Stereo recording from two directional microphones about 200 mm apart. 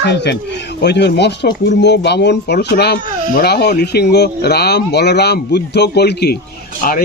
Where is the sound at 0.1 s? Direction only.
60° left (ahead or behind).